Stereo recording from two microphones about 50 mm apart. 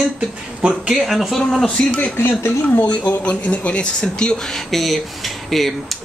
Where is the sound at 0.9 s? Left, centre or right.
Centre.